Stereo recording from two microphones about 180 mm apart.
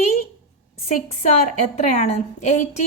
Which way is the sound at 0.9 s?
40° left (ahead or behind).